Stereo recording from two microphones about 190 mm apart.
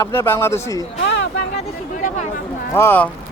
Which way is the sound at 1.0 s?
65° left (ahead or behind).